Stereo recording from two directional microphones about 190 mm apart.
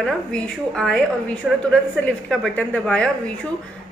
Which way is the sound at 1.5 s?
5° right (ahead or behind).